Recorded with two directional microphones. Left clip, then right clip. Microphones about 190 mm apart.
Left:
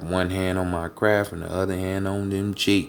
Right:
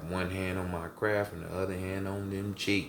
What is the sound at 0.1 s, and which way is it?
Speech, 55° left (ahead or behind).